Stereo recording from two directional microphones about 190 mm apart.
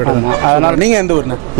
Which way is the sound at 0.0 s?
25° right (ahead or behind).